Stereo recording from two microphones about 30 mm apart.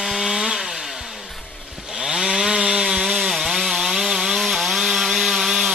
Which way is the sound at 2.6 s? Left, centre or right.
Right.